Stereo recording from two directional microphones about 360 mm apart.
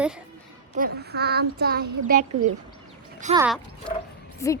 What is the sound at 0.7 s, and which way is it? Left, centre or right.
Child singing, right.